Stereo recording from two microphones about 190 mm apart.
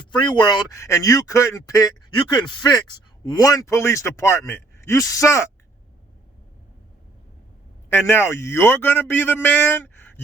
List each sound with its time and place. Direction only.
0.1 s speech: 25° left (ahead or behind)
7.9 s speech: 10° left (ahead or behind)